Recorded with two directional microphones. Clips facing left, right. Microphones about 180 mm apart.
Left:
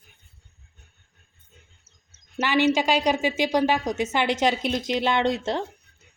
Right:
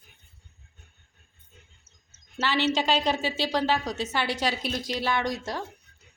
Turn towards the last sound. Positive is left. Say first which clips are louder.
# left 5 dB
turn(degrees=25)  # may be behind; listen again after turning